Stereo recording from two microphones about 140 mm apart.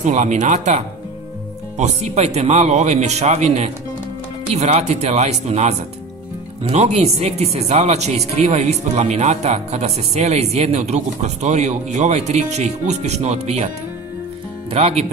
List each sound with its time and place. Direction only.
0.0 s speech: 55° right (ahead or behind)
14.7 s speech: 50° right (ahead or behind)